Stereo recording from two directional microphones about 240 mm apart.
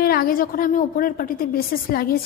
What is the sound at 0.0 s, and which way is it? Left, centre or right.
A woman's voice, left.